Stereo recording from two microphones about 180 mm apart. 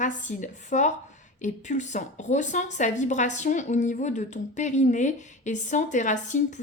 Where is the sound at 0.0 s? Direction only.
45° left (ahead or behind).